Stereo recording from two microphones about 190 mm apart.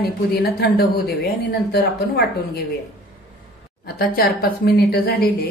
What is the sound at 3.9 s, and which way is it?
A woman's voice, 50° left (ahead or behind).